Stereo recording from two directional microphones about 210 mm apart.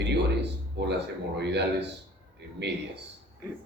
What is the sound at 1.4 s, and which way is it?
A man's voice, 55° right (ahead or behind).